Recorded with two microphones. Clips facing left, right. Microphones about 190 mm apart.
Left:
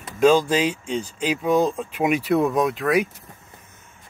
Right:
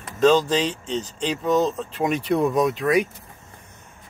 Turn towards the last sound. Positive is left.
turn(degrees=0)  # may be behind; listen again after turning